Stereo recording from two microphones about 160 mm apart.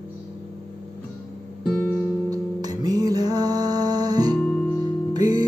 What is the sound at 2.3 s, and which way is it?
Music, 25° right (ahead or behind).